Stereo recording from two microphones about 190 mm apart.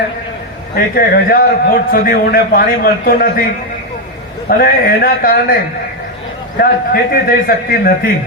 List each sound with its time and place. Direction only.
0.9 s a man's voice: 50° left (ahead or behind)
4.4 s a man's voice: 50° left (ahead or behind)
6.6 s a man's voice: 50° left (ahead or behind)